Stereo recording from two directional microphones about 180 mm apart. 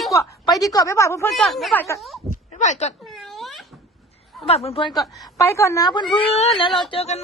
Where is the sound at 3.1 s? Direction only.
Centre (ahead or behind).